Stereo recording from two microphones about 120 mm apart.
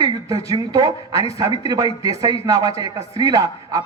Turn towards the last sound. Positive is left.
turn(degrees=-30)  # may be behind; listen again after turning